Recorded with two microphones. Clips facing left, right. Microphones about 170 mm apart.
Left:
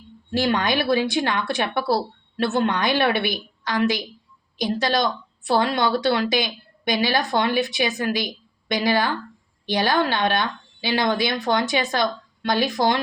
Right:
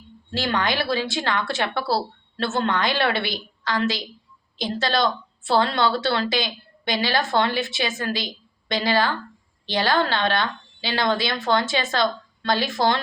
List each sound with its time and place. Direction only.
0.3 s speech: 15° left (ahead or behind)